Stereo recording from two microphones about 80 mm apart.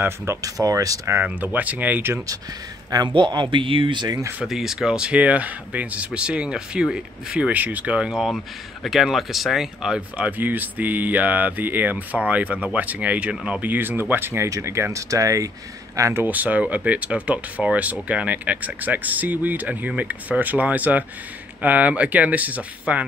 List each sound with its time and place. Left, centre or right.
0.0 s speech: right
1.2 s speech: centre
3.1 s speech: right
4.5 s speech: centre
10.1 s speech: right
16.0 s speech: right
16.3 s speech: centre